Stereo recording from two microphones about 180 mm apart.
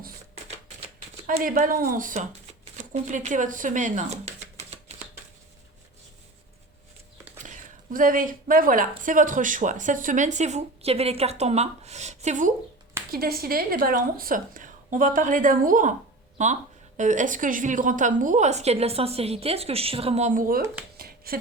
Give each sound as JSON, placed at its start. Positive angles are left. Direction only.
{"t": 1.4, "sound": "speech", "side_deg": -50}
{"t": 7.4, "sound": "speech", "side_deg": -45}
{"t": 13.1, "sound": "a woman's voice", "side_deg": -55}
{"t": 20.9, "sound": "a sound", "side_deg": -55}